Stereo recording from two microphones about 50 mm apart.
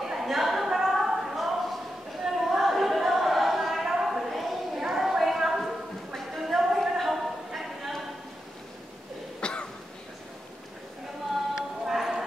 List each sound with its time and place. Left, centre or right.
0.0 s a sound: centre
9.4 s cough: left
11.5 s clip-clop: centre